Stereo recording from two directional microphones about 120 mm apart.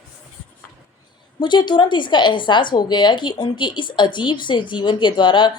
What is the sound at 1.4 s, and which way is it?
A woman's voice, 40° left (ahead or behind).